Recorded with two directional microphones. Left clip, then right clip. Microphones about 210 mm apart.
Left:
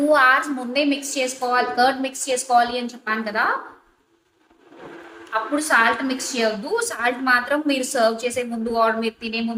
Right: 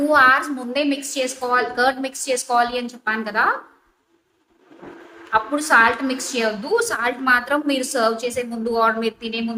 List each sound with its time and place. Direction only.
0.1 s a woman's voice: 20° right (ahead or behind)
5.3 s a woman's voice: 25° right (ahead or behind)